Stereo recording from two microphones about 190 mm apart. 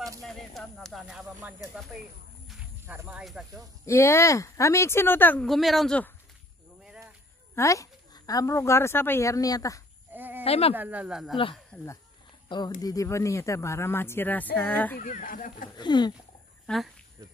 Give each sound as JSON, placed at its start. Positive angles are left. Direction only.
{"t": 0.2, "sound": "speech", "side_deg": 0}
{"t": 2.4, "sound": "clip-clop", "side_deg": 0}
{"t": 3.0, "sound": "speech", "side_deg": -5}
{"t": 3.8, "sound": "speech", "side_deg": 15}
{"t": 7.5, "sound": "speech", "side_deg": 15}
{"t": 10.1, "sound": "a sound", "side_deg": -10}
{"t": 10.4, "sound": "speech", "side_deg": 30}
{"t": 10.7, "sound": "speech", "side_deg": -10}
{"t": 12.4, "sound": "speech", "side_deg": 25}
{"t": 15.0, "sound": "speech", "side_deg": 45}
{"t": 15.8, "sound": "a sound", "side_deg": 25}
{"t": 16.6, "sound": "speech", "side_deg": 0}